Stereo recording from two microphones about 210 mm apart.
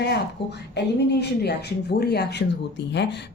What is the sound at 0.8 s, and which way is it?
Speech, 50° left (ahead or behind).